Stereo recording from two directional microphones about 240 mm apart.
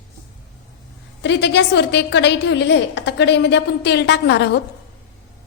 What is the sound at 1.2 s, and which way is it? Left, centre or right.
A woman's voice, left.